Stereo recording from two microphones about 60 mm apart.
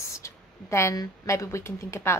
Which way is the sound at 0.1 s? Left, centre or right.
Left.